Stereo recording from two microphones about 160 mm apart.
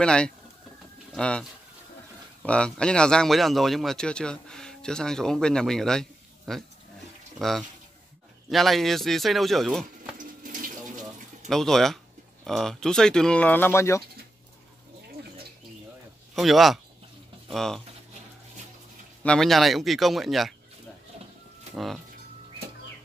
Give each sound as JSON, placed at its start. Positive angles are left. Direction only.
{"t": 0.0, "sound": "a man's voice", "side_deg": 5}
{"t": 10.1, "sound": "water tap", "side_deg": -60}
{"t": 11.4, "sound": "a man's voice", "side_deg": 0}
{"t": 16.3, "sound": "a man's voice", "side_deg": 0}
{"t": 19.2, "sound": "a man's voice", "side_deg": 5}